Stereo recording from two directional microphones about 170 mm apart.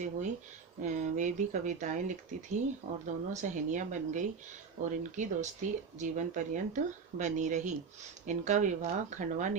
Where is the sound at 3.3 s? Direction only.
45° right (ahead or behind).